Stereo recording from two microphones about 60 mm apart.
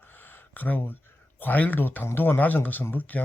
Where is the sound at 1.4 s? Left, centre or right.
Left.